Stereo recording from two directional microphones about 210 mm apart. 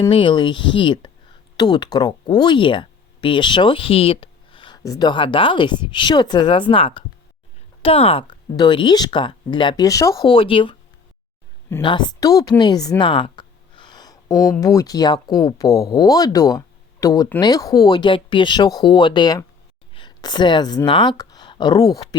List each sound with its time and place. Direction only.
0.1 s speech: 25° left (ahead or behind)
11.8 s speech: 20° left (ahead or behind)